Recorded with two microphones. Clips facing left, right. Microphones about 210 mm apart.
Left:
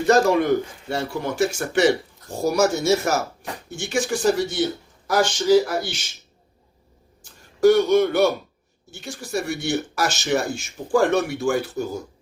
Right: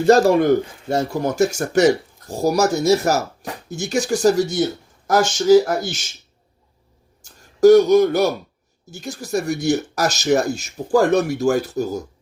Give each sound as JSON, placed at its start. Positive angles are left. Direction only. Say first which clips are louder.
{"t": 0.0, "sound": "speech", "louder": "right 4 dB", "side_deg": -30}
{"t": 0.9, "sound": "speech", "louder": "right 6 dB", "side_deg": -40}
{"t": 7.2, "sound": "speech", "louder": "right 4 dB", "side_deg": -40}